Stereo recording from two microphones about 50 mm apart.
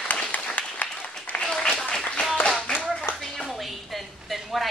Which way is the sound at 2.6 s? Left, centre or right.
Left.